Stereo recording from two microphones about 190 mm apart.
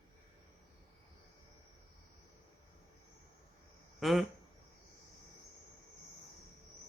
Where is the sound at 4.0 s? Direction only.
Centre (ahead or behind).